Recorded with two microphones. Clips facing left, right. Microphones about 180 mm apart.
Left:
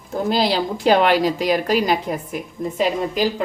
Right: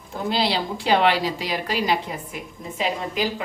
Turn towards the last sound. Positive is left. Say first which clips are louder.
# left 5 dB
turn(degrees=40)  # may be behind; listen again after turning